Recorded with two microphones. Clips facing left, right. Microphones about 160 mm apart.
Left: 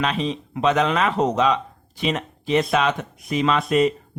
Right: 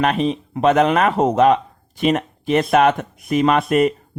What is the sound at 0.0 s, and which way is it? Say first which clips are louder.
Speech: right 5 dB; 55° right (ahead or behind).